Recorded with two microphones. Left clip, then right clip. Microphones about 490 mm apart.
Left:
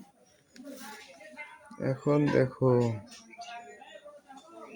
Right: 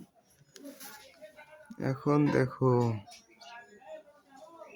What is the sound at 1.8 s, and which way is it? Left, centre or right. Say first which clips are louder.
Speech: left 1 dB; right.